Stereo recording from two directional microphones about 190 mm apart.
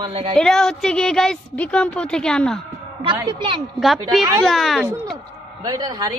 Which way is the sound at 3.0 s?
25° right (ahead or behind).